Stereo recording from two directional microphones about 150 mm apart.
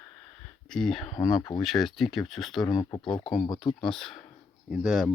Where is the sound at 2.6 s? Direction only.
25° left (ahead or behind).